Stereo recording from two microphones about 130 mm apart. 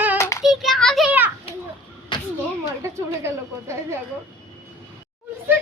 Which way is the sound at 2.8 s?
20° right (ahead or behind).